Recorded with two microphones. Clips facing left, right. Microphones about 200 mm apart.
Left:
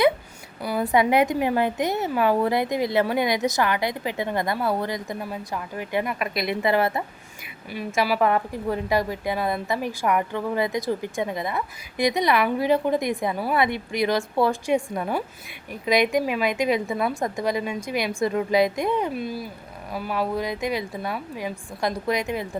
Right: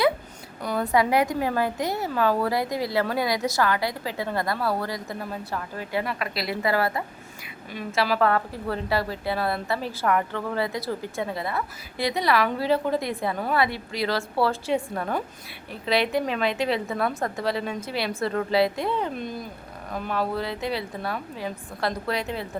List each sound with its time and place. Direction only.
0.6 s a sound: 10° left (ahead or behind)
0.9 s a woman's voice: 20° left (ahead or behind)
7.7 s a woman's voice: 10° left (ahead or behind)